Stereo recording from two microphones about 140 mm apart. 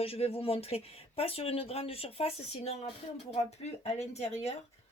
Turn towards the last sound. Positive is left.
turn(degrees=50)  # may be behind; listen again after turning